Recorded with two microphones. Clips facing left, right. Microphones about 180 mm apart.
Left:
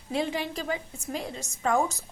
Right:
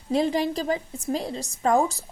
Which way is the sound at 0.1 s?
40° right (ahead or behind).